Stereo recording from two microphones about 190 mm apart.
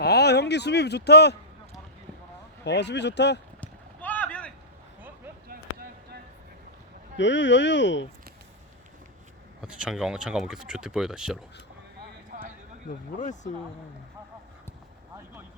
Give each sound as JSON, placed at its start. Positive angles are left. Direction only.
{"t": 0.0, "sound": "speech", "side_deg": 60}
{"t": 2.6, "sound": "speech", "side_deg": 65}
{"t": 3.6, "sound": "run", "side_deg": 10}
{"t": 5.5, "sound": "a sound", "side_deg": -50}
{"t": 7.2, "sound": "speech", "side_deg": 70}
{"t": 9.6, "sound": "speech", "side_deg": -5}
{"t": 12.3, "sound": "a sound", "side_deg": -45}
{"t": 12.9, "sound": "speech", "side_deg": 40}